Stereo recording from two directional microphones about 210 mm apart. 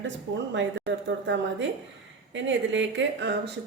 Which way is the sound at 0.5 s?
60° right (ahead or behind).